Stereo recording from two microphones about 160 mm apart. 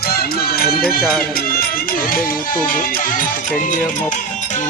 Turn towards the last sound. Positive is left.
turn(degrees=55)  # may be behind; listen again after turning